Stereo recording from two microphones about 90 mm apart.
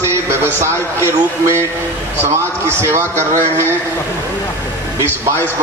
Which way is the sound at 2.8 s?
30° right (ahead or behind).